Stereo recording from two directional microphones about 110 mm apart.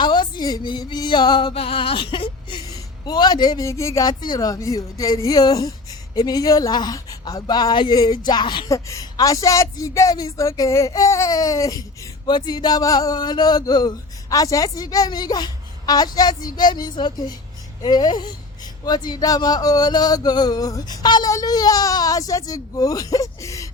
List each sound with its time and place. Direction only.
0.0 s a sound: 40° left (ahead or behind)
1.5 s a woman's voice: 55° left (ahead or behind)
2.6 s a woman's voice: 35° left (ahead or behind)
8.7 s a woman's voice: 30° left (ahead or behind)